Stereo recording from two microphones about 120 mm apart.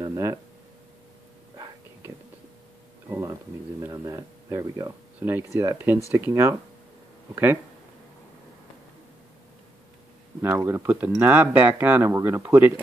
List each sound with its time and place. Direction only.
0.0 s speech: 30° right (ahead or behind)
3.1 s speech: 25° right (ahead or behind)
10.4 s speech: 20° right (ahead or behind)